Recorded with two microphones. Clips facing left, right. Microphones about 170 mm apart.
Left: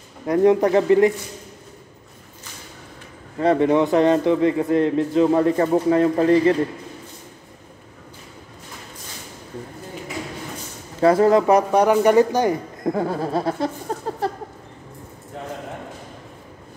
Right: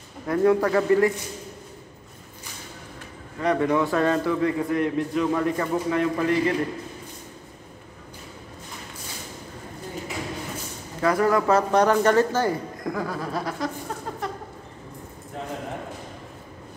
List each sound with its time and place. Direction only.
0.3 s a man's voice: 20° left (ahead or behind)
3.3 s a man's voice: 30° left (ahead or behind)
11.0 s speech: 30° left (ahead or behind)
12.8 s a man's voice: 30° left (ahead or behind)